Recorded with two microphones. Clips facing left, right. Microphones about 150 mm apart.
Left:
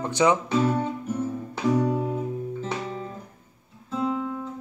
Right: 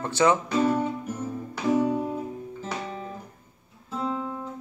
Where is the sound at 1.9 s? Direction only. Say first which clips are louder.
Left 1 dB; 10° left (ahead or behind).